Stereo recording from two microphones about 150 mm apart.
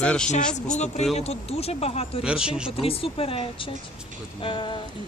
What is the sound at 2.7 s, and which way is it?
Speech, 40° left (ahead or behind).